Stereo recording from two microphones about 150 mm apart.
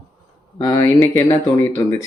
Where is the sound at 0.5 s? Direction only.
25° left (ahead or behind).